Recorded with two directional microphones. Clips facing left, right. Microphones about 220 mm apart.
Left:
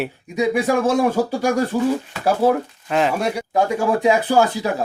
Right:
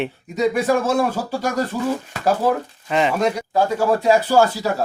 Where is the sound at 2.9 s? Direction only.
Centre (ahead or behind); by 4.8 s 15° left (ahead or behind).